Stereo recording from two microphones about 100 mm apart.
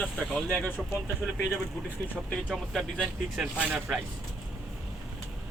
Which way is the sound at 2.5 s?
Centre (ahead or behind).